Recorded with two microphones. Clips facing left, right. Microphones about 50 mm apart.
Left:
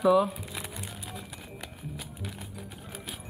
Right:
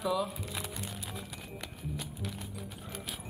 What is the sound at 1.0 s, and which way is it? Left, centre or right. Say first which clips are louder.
Music: left 1 dB; centre.